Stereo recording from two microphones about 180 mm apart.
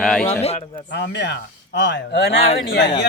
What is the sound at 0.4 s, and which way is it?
Speech, 35° left (ahead or behind).